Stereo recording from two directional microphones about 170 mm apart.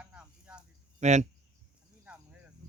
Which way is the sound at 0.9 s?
40° right (ahead or behind).